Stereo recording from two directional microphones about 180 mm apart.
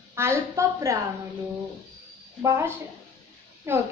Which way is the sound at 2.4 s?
15° right (ahead or behind).